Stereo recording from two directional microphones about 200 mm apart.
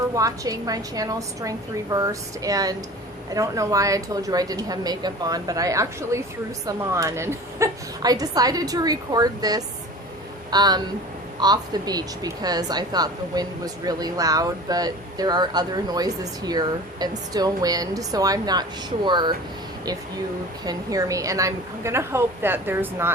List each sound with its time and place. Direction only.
0.1 s a woman's voice: 15° right (ahead or behind)
20.7 s a woman's voice: 15° right (ahead or behind)